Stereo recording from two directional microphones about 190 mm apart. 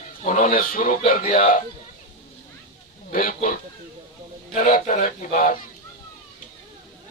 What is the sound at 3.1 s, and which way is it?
A man's voice, 45° left (ahead or behind).